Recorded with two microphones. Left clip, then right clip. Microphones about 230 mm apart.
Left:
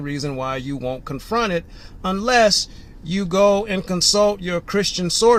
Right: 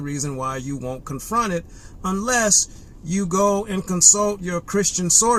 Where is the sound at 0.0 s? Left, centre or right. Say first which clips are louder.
Left 1 dB; right.